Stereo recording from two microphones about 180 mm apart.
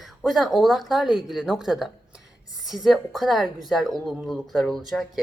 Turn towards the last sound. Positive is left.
turn(degrees=0)  # may be behind; listen again after turning